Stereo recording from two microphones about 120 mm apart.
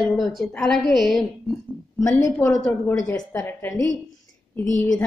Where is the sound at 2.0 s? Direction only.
30° left (ahead or behind).